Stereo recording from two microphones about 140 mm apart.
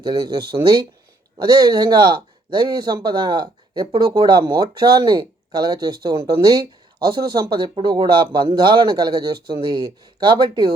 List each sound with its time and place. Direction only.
0.0 s speech: 30° right (ahead or behind)